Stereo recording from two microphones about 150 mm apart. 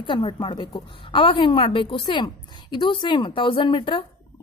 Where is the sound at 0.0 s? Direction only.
35° left (ahead or behind).